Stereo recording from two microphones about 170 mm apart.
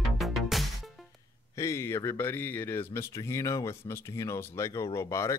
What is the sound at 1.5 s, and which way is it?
Speech, 15° left (ahead or behind).